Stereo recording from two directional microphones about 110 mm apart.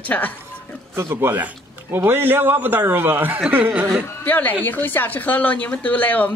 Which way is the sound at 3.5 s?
15° right (ahead or behind).